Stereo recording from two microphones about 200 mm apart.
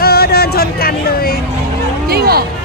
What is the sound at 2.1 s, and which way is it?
Speech, 50° right (ahead or behind).